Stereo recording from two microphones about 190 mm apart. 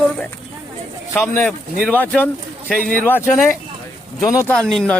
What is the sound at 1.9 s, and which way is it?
A man's voice, 10° left (ahead or behind).